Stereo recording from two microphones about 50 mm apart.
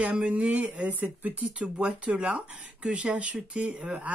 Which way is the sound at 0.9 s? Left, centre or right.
Right.